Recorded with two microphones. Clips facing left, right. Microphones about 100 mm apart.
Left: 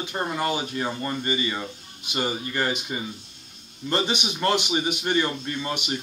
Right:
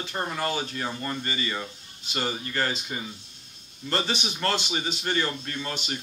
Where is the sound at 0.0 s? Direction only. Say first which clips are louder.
Left 3 dB; 15° left (ahead or behind).